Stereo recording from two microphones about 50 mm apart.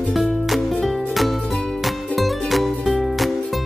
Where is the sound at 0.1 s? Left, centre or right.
Centre.